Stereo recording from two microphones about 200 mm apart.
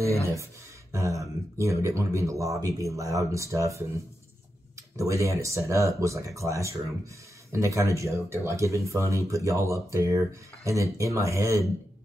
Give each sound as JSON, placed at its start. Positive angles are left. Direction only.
{"t": 0.0, "sound": "speech", "side_deg": -15}